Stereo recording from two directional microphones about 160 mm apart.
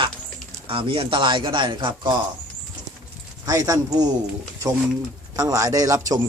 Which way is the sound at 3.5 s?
20° right (ahead or behind).